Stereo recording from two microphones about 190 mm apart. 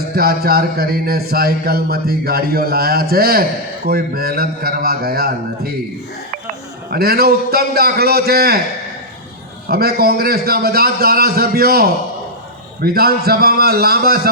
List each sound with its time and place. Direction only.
0.1 s speech: 55° right (ahead or behind)
6.9 s speech: 55° right (ahead or behind)
9.6 s speech: 55° right (ahead or behind)